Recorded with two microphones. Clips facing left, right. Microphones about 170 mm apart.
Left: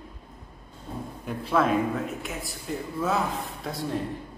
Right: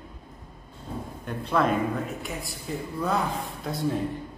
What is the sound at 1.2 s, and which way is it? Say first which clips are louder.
A man's voice: even; 5° left (ahead or behind).